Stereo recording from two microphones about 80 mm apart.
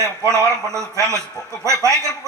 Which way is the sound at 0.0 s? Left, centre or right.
Right.